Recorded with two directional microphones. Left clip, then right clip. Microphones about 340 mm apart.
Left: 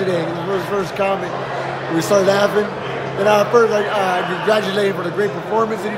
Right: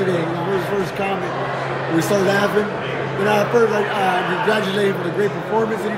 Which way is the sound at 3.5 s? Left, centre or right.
Centre.